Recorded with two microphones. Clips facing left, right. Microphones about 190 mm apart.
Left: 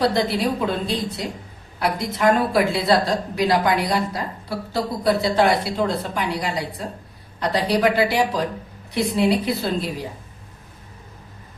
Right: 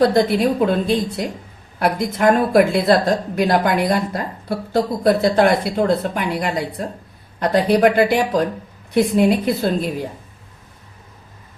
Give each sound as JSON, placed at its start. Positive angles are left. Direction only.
{"t": 0.0, "sound": "a woman's voice", "side_deg": -50}